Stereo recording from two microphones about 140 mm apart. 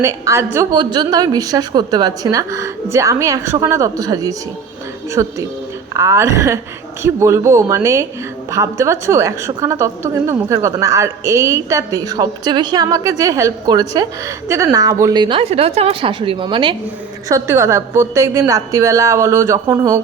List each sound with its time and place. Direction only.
0.0 s a woman's voice: 20° right (ahead or behind)
15.4 s a woman's voice: 45° right (ahead or behind)
17.2 s a woman's voice: 20° right (ahead or behind)